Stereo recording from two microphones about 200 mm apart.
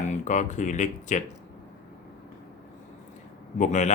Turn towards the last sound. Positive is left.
turn(degrees=35)  # may be behind; listen again after turning